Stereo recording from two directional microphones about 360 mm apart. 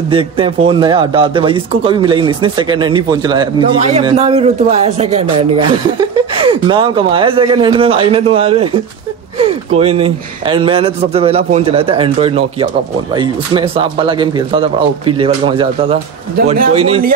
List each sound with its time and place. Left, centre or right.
0.1 s a man's voice: centre